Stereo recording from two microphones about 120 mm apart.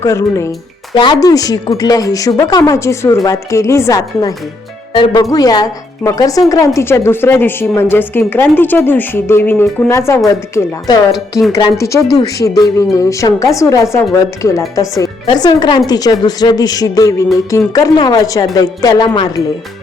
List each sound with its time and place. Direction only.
0.0 s speech: 25° left (ahead or behind)
0.9 s speech: 40° left (ahead or behind)